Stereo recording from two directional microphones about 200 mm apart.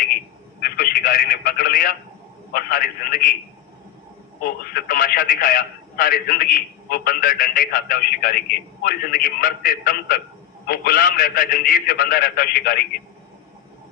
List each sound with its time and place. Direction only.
0.6 s telephone: 50° left (ahead or behind)
2.5 s speech: 50° left (ahead or behind)
4.6 s speech: 50° left (ahead or behind)